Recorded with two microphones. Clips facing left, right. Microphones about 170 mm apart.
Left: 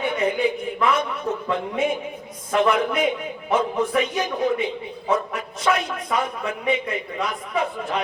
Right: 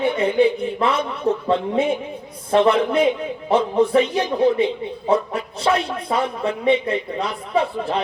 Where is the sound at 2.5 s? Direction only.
30° right (ahead or behind).